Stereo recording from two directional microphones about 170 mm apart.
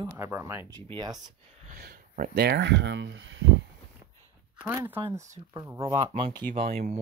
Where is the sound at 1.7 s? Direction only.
60° right (ahead or behind); by 3.5 s 90° right.